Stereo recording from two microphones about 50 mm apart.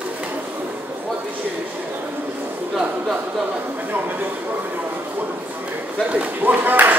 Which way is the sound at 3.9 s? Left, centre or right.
Right.